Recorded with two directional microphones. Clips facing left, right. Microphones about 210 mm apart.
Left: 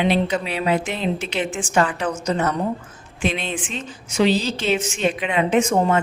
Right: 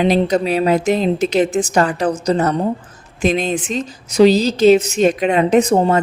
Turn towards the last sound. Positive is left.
turn(degrees=-35)  # may be behind; listen again after turning